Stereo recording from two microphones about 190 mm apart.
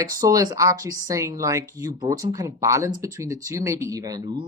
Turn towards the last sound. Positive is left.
turn(degrees=-20)  # may be behind; listen again after turning